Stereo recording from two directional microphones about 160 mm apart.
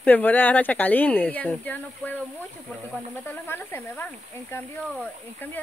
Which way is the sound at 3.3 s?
10° left (ahead or behind).